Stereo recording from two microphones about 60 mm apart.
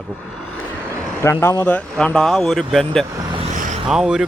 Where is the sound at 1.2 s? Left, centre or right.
Left.